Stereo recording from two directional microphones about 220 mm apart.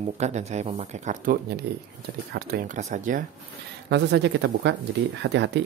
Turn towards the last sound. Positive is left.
turn(degrees=-55)  # may be behind; listen again after turning